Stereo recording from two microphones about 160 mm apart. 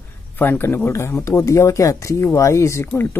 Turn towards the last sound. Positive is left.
turn(degrees=15)  # may be behind; listen again after turning